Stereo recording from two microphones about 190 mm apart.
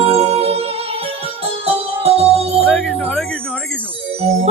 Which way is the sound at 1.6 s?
30° right (ahead or behind).